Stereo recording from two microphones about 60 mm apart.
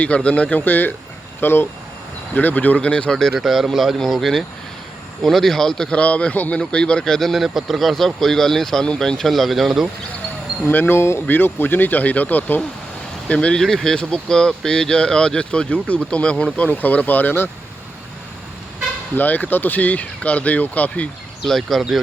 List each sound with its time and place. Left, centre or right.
0.0 s speech: centre
3.3 s speech: centre
6.0 s speech: left; by 9.9 s centre
10.7 s speech: left
11.3 s speech: left; by 13.6 s centre
13.6 s speech: centre; by 17.5 s left
19.1 s speech: left
21.4 s speech: centre